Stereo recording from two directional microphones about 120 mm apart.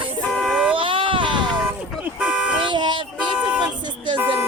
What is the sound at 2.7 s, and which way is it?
Vehicle, 40° right (ahead or behind).